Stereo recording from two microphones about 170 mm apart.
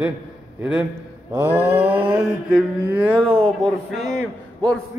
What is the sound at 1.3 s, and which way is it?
Speech, 10° right (ahead or behind).